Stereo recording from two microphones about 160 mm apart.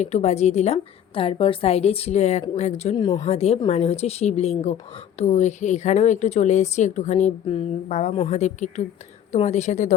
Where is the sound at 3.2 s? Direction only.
40° left (ahead or behind).